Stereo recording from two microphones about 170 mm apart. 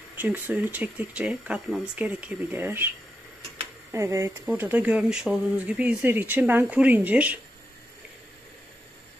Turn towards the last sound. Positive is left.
turn(degrees=-10)  # may be behind; listen again after turning